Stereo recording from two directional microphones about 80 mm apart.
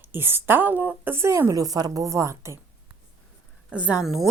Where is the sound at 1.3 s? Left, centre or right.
Right.